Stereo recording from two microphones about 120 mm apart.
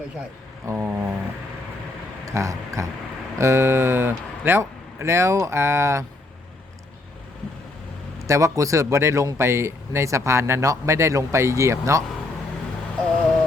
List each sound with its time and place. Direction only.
0.7 s speech: 25° right (ahead or behind)
2.2 s speech: 25° right (ahead or behind)
8.2 s speech: 25° right (ahead or behind)